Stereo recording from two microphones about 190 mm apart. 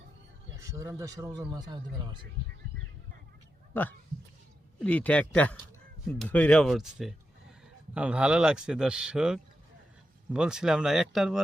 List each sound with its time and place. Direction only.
0.5 s speech: 15° right (ahead or behind)
3.7 s speech: 10° left (ahead or behind)